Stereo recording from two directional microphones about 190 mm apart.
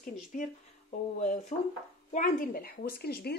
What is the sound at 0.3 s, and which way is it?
Speech, 45° left (ahead or behind).